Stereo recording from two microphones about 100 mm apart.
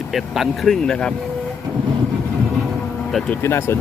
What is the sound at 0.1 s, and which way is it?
Speech, centre (ahead or behind).